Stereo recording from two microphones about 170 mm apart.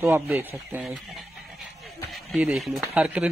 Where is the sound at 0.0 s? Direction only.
15° right (ahead or behind).